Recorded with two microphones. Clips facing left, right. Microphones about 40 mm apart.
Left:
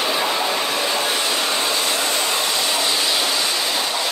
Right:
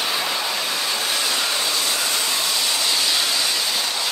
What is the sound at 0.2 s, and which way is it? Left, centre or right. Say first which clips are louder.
Train: left 4 dB; left.